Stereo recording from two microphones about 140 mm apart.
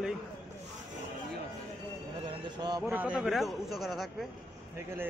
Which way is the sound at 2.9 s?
10° right (ahead or behind).